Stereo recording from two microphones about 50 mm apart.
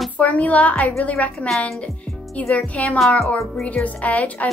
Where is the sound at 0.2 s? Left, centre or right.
Left.